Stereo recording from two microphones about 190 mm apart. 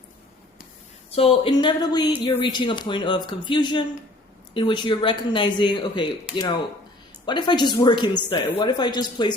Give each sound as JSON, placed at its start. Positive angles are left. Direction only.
{"t": 1.1, "sound": "speech", "side_deg": 30}